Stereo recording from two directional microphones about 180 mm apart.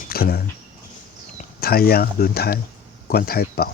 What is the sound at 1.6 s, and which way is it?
Speech, 60° left (ahead or behind).